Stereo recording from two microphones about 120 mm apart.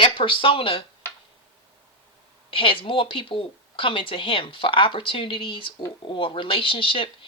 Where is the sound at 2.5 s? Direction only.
45° left (ahead or behind).